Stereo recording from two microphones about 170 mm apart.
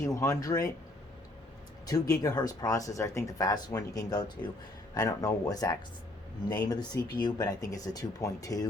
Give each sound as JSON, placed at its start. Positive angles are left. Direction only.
{"t": 0.1, "sound": "speech", "side_deg": 20}
{"t": 1.9, "sound": "speech", "side_deg": 20}